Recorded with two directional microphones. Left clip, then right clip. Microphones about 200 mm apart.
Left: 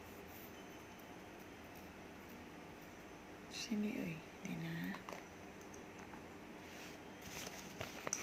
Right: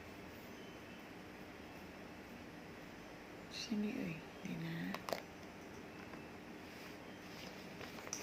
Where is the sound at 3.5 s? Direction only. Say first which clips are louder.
Even; 25° left (ahead or behind).